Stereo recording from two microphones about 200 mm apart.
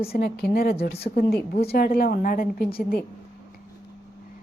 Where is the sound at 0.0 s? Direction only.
50° left (ahead or behind).